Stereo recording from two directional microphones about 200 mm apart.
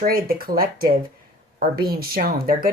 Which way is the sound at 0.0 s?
45° right (ahead or behind).